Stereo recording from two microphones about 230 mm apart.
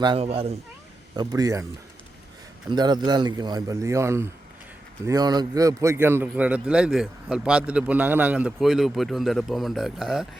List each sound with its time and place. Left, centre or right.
0.0 s a man's voice: right
2.6 s a man's voice: centre